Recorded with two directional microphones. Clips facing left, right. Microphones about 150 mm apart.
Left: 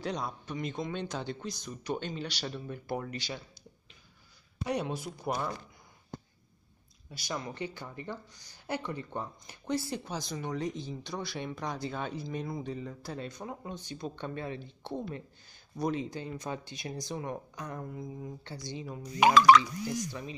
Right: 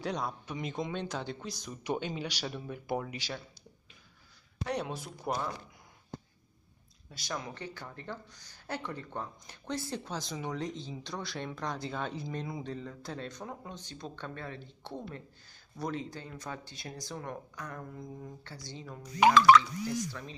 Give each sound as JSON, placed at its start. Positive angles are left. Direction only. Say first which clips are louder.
{"t": 0.0, "sound": "speech", "louder": "even", "side_deg": 0}
{"t": 4.6, "sound": "speech", "louder": "left 2 dB", "side_deg": 5}
{"t": 7.1, "sound": "speech", "louder": "left 2 dB", "side_deg": 5}
{"t": 7.5, "sound": "speech", "louder": "left 4 dB", "side_deg": 15}